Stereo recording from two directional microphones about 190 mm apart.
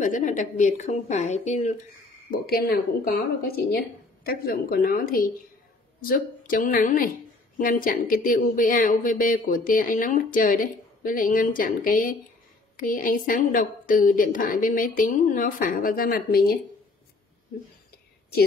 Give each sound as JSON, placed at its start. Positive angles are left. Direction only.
{"t": 0.0, "sound": "a woman's voice", "side_deg": 40}
{"t": 2.4, "sound": "speech", "side_deg": 55}